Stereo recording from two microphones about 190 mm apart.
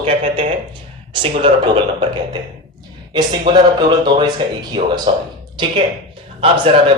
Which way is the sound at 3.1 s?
25° right (ahead or behind).